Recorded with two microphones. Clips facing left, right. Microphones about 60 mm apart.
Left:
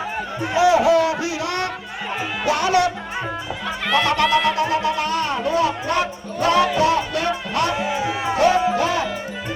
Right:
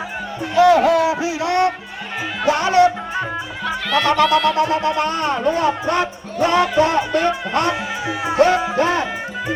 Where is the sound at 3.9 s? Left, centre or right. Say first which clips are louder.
Right 2 dB; centre.